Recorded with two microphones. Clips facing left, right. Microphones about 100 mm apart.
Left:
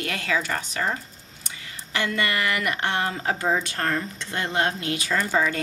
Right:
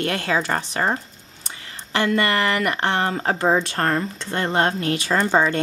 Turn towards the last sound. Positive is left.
turn(degrees=-35)  # may be behind; listen again after turning